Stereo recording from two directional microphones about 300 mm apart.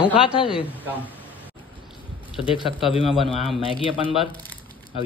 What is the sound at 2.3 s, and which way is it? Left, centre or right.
Speech, centre.